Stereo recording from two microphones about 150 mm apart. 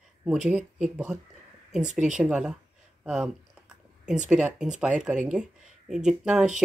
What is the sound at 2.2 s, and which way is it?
Speech, 5° right (ahead or behind).